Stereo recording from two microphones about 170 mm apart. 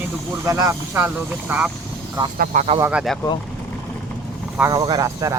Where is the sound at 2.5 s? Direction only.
40° right (ahead or behind).